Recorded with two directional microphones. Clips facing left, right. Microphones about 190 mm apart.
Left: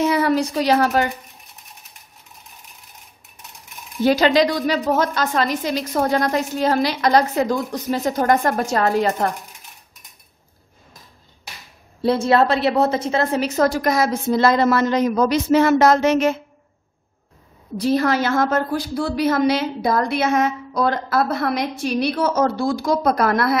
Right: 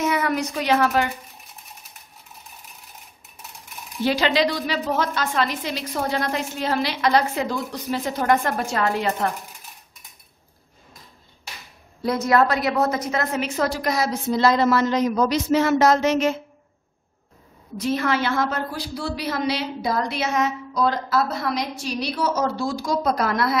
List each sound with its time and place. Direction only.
0.0 s speech: 30° left (ahead or behind)
4.0 s a woman's voice: 45° left (ahead or behind)
12.0 s a woman's voice: 30° left (ahead or behind); by 16.3 s 55° left (ahead or behind)
17.7 s a woman's voice: 35° left (ahead or behind); by 23.6 s 55° left (ahead or behind)